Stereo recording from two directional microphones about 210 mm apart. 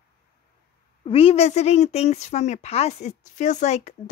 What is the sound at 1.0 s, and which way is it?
Speech, 25° left (ahead or behind).